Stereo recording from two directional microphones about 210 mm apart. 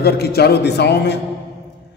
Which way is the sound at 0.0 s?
50° left (ahead or behind).